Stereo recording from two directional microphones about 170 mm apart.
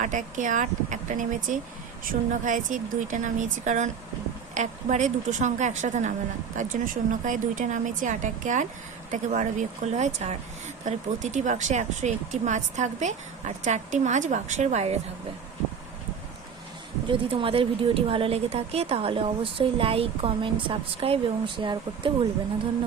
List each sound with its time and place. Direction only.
0.0 s speech: 50° right (ahead or behind)
17.1 s a woman's voice: 30° right (ahead or behind)